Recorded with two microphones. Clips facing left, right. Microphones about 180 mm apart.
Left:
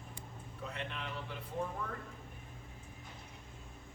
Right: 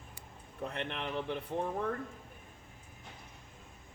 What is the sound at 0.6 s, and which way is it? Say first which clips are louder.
Speech: right 5 dB; 60° right (ahead or behind).